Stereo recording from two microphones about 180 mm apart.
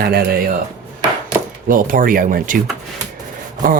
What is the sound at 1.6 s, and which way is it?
Speech, 50° right (ahead or behind).